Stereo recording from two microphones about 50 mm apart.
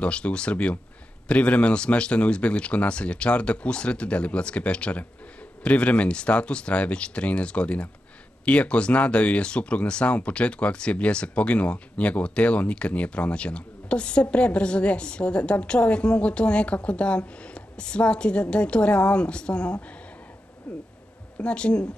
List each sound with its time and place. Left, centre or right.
0.0 s speech: left